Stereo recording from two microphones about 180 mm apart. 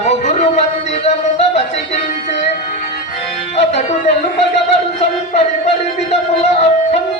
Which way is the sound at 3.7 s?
40° left (ahead or behind).